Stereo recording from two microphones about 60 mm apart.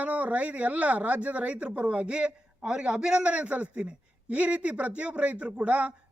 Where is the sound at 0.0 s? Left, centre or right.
Right.